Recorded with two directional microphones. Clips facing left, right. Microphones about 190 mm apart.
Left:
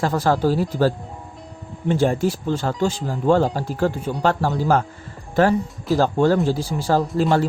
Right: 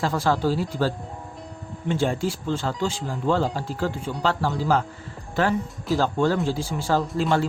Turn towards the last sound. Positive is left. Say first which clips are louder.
# left 4 dB
turn(degrees=40)  # may be behind; listen again after turning